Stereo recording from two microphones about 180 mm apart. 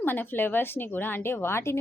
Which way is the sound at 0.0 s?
10° left (ahead or behind).